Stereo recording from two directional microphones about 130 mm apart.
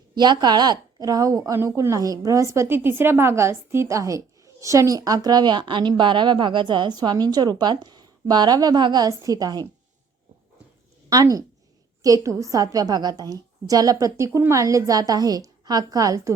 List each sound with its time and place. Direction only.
0.2 s a woman's voice: 35° right (ahead or behind)
11.1 s a woman's voice: 25° right (ahead or behind)